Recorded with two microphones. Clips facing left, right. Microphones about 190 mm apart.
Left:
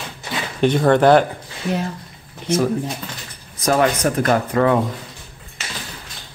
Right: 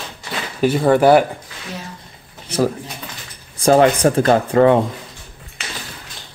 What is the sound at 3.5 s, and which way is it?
Speech, 30° right (ahead or behind).